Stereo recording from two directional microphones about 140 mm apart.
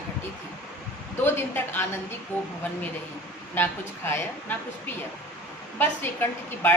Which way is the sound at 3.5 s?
15° left (ahead or behind).